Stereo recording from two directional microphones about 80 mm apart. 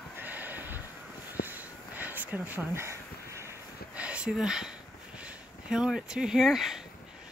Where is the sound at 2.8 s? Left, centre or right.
Right.